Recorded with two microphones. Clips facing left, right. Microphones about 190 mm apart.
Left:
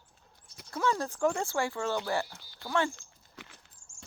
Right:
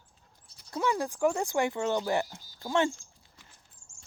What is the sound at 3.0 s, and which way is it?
Dog, 75° left (ahead or behind).